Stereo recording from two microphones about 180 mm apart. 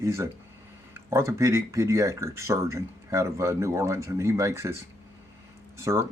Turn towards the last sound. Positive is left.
turn(degrees=-15)  # may be behind; listen again after turning